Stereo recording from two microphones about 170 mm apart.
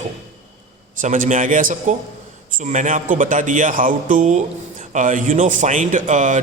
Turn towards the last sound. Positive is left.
turn(degrees=-50)  # may be behind; listen again after turning